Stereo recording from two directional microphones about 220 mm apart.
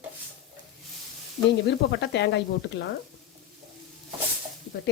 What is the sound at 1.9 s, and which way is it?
Speech, 50° left (ahead or behind).